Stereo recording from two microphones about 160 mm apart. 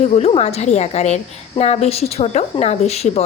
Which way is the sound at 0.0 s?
40° left (ahead or behind).